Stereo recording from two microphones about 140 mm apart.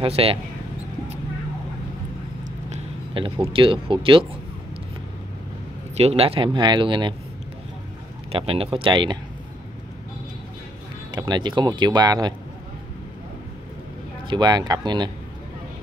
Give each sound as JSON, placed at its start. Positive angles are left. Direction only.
{"t": 0.0, "sound": "speech", "side_deg": -45}
{"t": 3.2, "sound": "speech", "side_deg": -40}
{"t": 5.9, "sound": "speech", "side_deg": -45}
{"t": 8.3, "sound": "speech", "side_deg": -45}
{"t": 11.1, "sound": "speech", "side_deg": -30}
{"t": 14.2, "sound": "speech", "side_deg": -30}